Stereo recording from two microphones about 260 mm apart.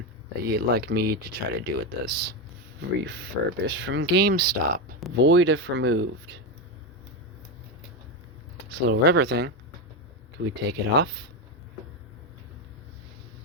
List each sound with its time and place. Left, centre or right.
0.4 s speech: right
5.1 s speech: right
8.7 s speech: right